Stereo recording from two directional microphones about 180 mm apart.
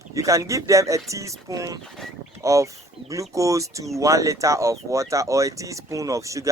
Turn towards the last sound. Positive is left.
turn(degrees=-15)  # may be behind; listen again after turning